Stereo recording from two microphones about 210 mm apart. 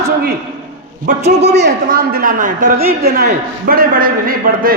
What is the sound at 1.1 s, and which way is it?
A man's voice, 40° right (ahead or behind).